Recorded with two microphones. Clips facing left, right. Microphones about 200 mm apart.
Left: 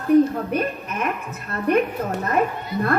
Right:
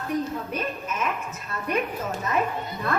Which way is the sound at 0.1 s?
60° left (ahead or behind).